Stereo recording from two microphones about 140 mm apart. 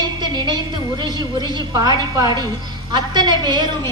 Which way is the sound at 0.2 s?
30° right (ahead or behind).